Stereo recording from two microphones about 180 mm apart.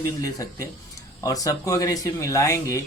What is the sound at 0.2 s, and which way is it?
Speech, 20° left (ahead or behind).